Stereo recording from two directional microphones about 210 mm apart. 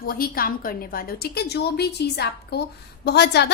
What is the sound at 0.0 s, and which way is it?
A woman's voice, 45° left (ahead or behind).